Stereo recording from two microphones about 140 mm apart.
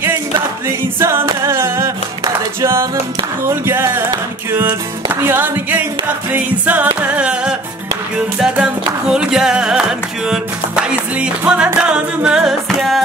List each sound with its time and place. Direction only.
0.7 s a capella: 20° right (ahead or behind)
1.3 s singing: 20° right (ahead or behind)
3.4 s a capella: 20° right (ahead or behind)
4.5 s music: 20° right (ahead or behind); by 13.0 s centre (ahead or behind)